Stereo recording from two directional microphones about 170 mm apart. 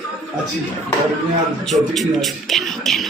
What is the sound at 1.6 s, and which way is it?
Speech, centre (ahead or behind).